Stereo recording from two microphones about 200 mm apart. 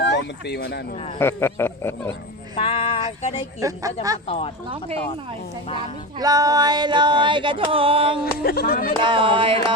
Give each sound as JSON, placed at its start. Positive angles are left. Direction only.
{"t": 0.0, "sound": "speech", "side_deg": 60}
{"t": 1.2, "sound": "speech", "side_deg": 10}
{"t": 2.6, "sound": "a sound", "side_deg": 25}
{"t": 3.6, "sound": "a woman's voice", "side_deg": -15}
{"t": 4.3, "sound": "speech", "side_deg": 30}
{"t": 6.1, "sound": "female singing", "side_deg": -20}
{"t": 8.2, "sound": "speech", "side_deg": 50}
{"t": 9.0, "sound": "female singing", "side_deg": -25}